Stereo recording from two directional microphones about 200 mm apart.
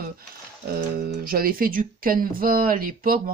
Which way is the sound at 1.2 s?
45° right (ahead or behind).